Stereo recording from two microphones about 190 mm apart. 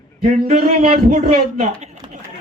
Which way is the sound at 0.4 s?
35° right (ahead or behind).